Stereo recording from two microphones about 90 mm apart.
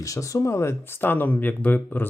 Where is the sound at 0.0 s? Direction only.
40° left (ahead or behind).